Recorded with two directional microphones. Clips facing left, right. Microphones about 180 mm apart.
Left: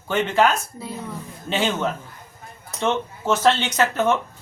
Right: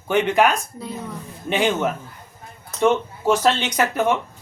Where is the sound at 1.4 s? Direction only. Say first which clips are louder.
Right 3 dB; 15° right (ahead or behind).